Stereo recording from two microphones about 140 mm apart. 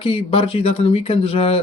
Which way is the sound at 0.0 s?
40° left (ahead or behind).